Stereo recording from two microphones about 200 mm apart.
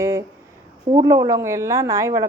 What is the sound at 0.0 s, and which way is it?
A woman's voice, 15° right (ahead or behind).